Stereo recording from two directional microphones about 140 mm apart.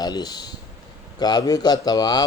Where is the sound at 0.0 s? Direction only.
30° left (ahead or behind).